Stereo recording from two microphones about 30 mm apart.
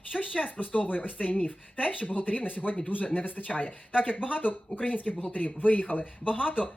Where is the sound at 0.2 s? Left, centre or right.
Left.